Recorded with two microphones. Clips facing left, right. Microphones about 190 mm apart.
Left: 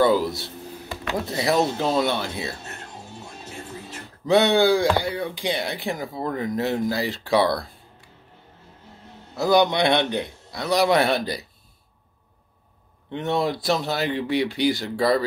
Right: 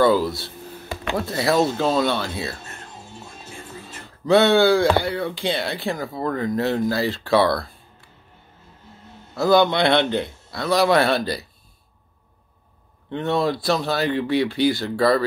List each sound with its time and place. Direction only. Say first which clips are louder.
0.0 s a man's voice: right 2 dB; 20° left (ahead or behind)
4.3 s speech: right 2 dB; 15° left (ahead or behind)
9.3 s a man's voice: right 2 dB; 15° left (ahead or behind)
13.1 s a man's voice: right 2 dB; 15° left (ahead or behind)